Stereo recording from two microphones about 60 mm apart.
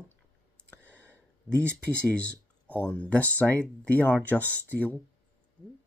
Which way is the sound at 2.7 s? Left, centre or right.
Left.